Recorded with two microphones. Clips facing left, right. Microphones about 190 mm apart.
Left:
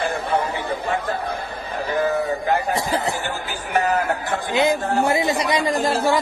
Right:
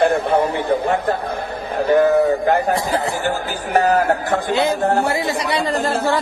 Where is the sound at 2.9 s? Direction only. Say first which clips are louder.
Right 2 dB; 20° left (ahead or behind).